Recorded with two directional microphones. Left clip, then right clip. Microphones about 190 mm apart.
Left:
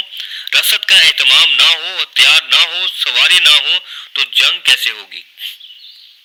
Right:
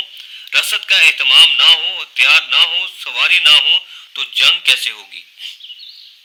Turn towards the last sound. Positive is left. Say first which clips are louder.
# left 4 dB
turn(degrees=15)  # may be behind; listen again after turning